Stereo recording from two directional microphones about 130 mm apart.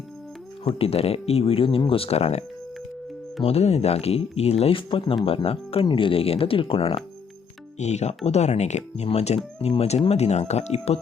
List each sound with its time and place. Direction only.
0.6 s speech: 45° left (ahead or behind)
3.4 s speech: 55° left (ahead or behind)
7.8 s speech: 60° left (ahead or behind)